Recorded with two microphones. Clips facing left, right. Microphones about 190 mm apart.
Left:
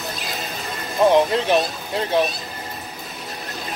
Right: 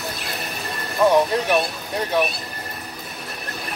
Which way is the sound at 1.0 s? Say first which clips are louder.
Left 1 dB; 20° left (ahead or behind).